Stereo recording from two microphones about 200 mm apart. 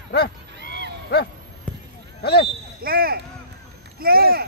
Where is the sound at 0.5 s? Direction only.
60° right (ahead or behind).